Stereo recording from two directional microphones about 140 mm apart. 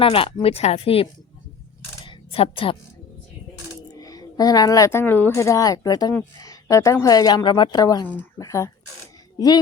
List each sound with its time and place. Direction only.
0.0 s a woman's voice: 40° left (ahead or behind)
2.0 s a sound: 40° left (ahead or behind)
3.9 s a woman's voice: 25° left (ahead or behind)